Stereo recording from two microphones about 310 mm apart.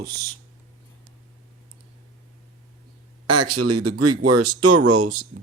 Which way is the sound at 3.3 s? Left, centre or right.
Right.